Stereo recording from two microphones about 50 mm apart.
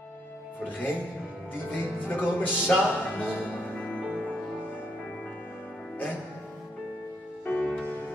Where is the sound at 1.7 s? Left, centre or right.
Left.